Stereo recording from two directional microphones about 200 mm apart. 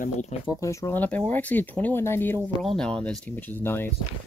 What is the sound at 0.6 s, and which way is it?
Speech, 15° left (ahead or behind).